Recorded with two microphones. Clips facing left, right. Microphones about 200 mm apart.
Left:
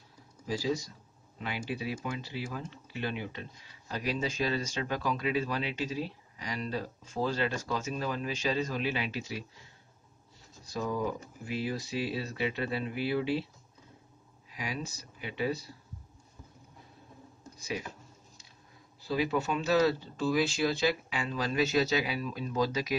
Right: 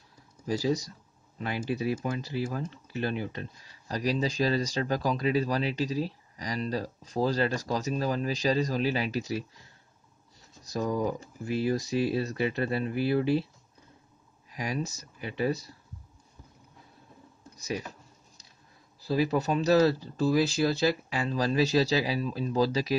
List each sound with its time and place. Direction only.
0.5 s speech: 45° right (ahead or behind)
10.6 s speech: 40° right (ahead or behind)
14.5 s speech: 45° right (ahead or behind)
17.4 s a sound: 40° right (ahead or behind)
19.0 s speech: 40° right (ahead or behind)